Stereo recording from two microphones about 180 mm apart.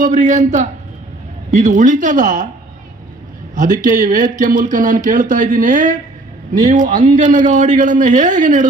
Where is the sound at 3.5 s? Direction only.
45° right (ahead or behind).